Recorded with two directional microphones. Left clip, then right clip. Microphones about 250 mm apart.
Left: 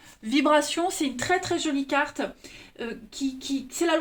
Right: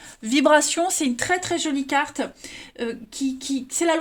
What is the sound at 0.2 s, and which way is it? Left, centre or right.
A woman's voice, right.